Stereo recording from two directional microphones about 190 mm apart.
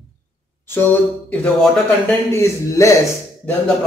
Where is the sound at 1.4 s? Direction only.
5° left (ahead or behind).